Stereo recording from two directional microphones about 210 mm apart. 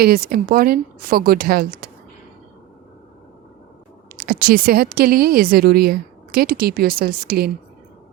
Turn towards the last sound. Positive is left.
turn(degrees=-45)  # may be behind; listen again after turning